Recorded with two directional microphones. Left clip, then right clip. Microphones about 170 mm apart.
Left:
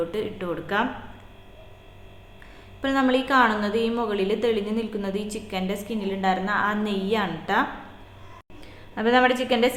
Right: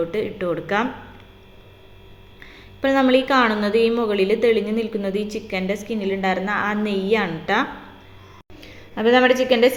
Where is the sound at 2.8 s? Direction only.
15° right (ahead or behind).